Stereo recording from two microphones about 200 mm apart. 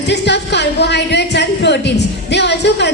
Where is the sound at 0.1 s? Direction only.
60° left (ahead or behind).